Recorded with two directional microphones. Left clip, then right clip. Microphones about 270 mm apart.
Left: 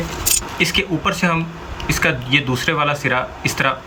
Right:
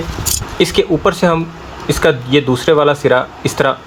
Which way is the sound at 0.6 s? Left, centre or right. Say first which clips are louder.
Right 7 dB; right.